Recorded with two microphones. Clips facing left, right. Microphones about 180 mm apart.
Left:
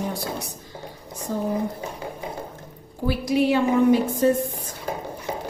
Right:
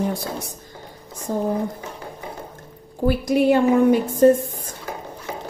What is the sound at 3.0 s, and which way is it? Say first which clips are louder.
A woman's voice: right 3 dB; 50° right (ahead or behind).